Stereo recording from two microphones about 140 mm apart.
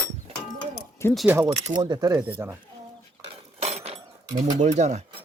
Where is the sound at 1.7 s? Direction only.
30° right (ahead or behind).